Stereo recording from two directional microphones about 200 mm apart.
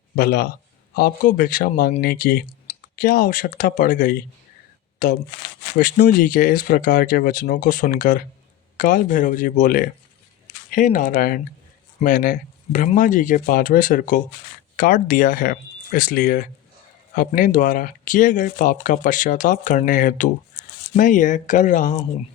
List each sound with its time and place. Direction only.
0.2 s speech: 50° left (ahead or behind)